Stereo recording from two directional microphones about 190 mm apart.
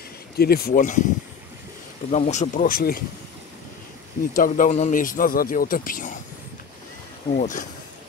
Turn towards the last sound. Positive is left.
turn(degrees=45)  # may be behind; listen again after turning